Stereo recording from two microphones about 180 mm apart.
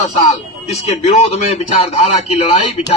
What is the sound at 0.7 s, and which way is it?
A man's voice, 35° left (ahead or behind).